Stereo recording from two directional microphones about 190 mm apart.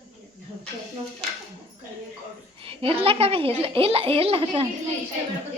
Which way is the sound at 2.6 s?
30° right (ahead or behind).